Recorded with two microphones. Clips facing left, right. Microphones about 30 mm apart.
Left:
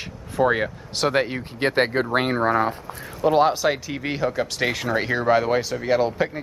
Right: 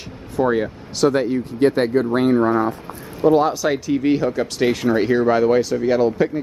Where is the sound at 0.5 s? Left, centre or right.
Left.